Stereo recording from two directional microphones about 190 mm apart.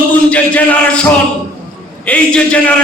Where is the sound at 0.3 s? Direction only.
5° left (ahead or behind).